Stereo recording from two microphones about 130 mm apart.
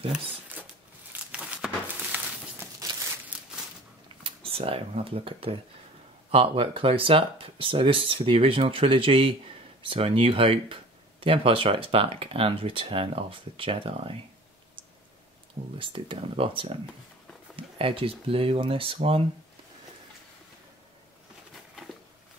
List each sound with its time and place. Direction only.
1.3 s a sound: 10° right (ahead or behind)
4.2 s speech: 45° right (ahead or behind)
15.8 s speech: 40° right (ahead or behind)